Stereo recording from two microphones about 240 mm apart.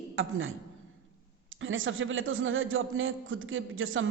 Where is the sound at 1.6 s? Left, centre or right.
Right.